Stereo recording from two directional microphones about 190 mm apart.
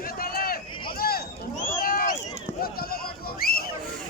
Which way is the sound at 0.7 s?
25° left (ahead or behind).